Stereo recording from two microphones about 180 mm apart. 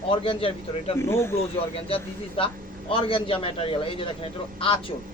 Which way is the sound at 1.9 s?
30° left (ahead or behind).